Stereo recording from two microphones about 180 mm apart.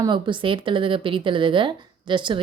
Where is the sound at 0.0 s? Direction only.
25° right (ahead or behind).